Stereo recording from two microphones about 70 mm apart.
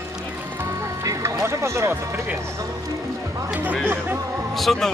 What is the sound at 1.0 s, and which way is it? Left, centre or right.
Music, right.